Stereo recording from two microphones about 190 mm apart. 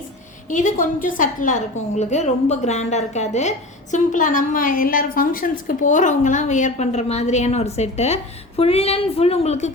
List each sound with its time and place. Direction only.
0.5 s a woman's voice: 45° left (ahead or behind)